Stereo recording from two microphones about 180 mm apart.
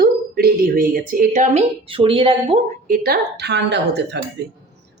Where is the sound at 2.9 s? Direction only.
60° right (ahead or behind).